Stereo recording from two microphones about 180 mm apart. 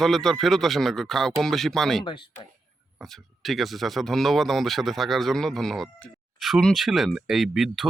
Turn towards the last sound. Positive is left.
turn(degrees=0)  # may be behind; listen again after turning